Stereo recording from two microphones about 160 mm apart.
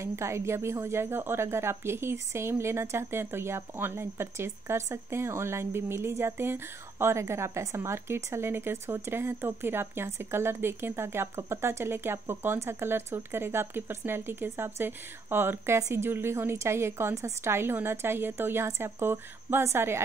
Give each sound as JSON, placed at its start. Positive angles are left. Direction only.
{"t": 0.0, "sound": "a woman's voice", "side_deg": -15}